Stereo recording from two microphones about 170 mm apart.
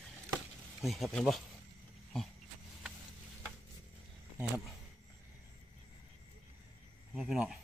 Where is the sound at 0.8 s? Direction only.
Centre (ahead or behind).